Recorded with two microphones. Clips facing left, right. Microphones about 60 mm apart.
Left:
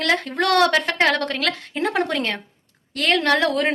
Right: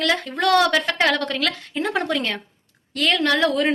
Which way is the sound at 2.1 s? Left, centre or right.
Left.